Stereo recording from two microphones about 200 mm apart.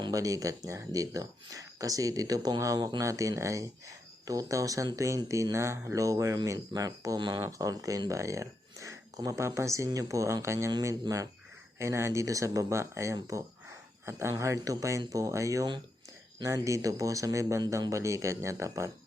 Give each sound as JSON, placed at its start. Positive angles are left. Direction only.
{"t": 0.0, "sound": "speech", "side_deg": -15}